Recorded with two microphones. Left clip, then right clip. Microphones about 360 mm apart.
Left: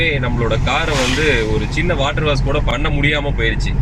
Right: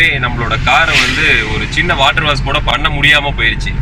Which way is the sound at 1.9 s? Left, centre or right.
Right.